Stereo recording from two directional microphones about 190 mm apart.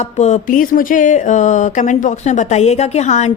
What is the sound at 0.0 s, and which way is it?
A man's voice, 35° left (ahead or behind).